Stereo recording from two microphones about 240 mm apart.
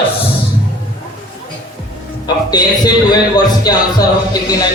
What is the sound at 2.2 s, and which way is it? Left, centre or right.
A man's voice, centre.